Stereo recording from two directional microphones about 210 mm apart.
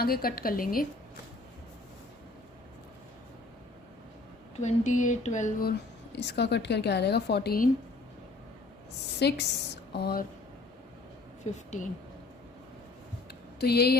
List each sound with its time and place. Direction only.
0.0 s a woman's voice: 45° left (ahead or behind)
4.6 s speech: 35° left (ahead or behind)
6.1 s a woman's voice: 55° left (ahead or behind)
9.1 s a woman's voice: 50° left (ahead or behind)
11.5 s speech: 35° left (ahead or behind)
13.6 s a woman's voice: 50° left (ahead or behind)